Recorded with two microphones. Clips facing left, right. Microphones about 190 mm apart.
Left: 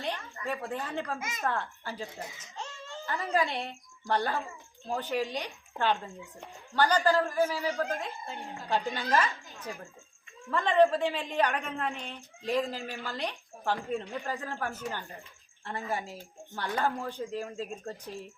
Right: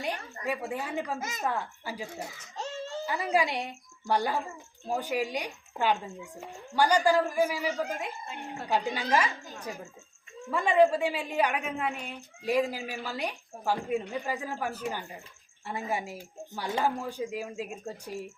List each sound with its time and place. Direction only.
0.4 s a woman's voice: 10° right (ahead or behind)
2.6 s a sound: 40° right (ahead or behind)
3.1 s a woman's voice: 10° right (ahead or behind)
10.5 s a woman's voice: 10° right (ahead or behind)